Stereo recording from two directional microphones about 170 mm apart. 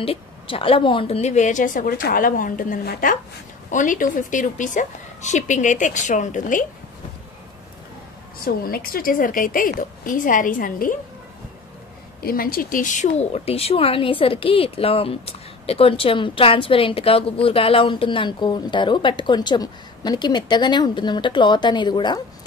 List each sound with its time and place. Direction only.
0.0 s a woman's voice: 30° left (ahead or behind); by 6.6 s 50° left (ahead or behind)
8.5 s a woman's voice: 60° left (ahead or behind)
12.2 s speech: 60° left (ahead or behind); by 22.2 s 25° left (ahead or behind)